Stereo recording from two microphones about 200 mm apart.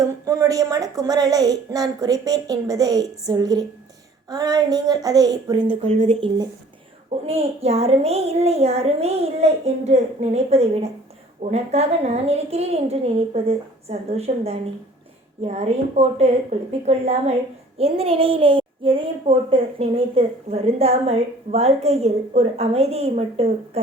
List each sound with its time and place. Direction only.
0.0 s a child's voice: 15° right (ahead or behind)
5.8 s a child's voice: 30° right (ahead or behind)